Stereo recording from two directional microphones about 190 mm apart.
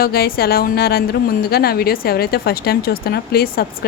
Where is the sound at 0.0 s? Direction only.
55° left (ahead or behind).